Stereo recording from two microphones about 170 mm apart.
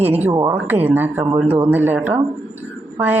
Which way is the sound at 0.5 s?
10° right (ahead or behind).